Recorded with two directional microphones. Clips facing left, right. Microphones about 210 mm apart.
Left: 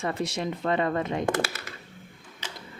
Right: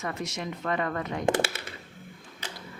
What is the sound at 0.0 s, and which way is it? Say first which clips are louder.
Speech: left 4 dB; 30° left (ahead or behind).